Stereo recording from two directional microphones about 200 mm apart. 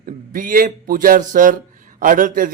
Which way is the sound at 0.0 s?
45° right (ahead or behind).